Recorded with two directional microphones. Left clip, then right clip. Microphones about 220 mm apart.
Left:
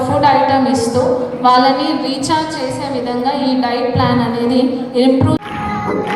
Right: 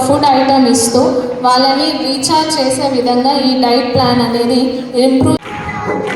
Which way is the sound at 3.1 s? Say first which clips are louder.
Right 2 dB; 35° right (ahead or behind).